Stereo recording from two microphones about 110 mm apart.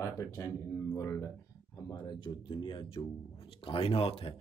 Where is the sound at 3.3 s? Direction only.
55° left (ahead or behind).